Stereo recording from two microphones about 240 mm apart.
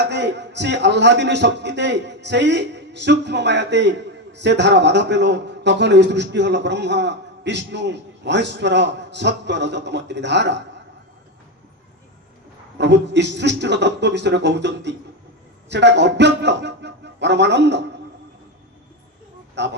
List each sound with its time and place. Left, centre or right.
0.1 s a man's voice: right
12.7 s a man's voice: right
19.6 s a man's voice: right